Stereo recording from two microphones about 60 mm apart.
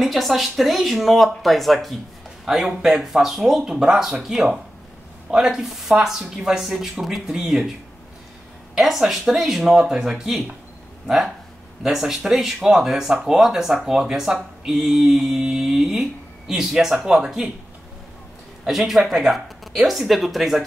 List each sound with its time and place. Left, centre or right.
0.0 s speech: centre
8.7 s speech: centre
18.7 s speech: centre